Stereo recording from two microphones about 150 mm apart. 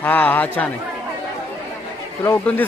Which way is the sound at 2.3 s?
10° left (ahead or behind).